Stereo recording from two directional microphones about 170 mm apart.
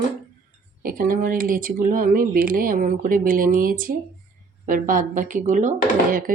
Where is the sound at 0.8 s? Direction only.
55° right (ahead or behind).